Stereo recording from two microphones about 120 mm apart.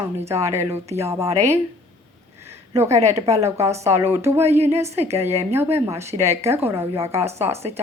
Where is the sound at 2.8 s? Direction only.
65° right (ahead or behind).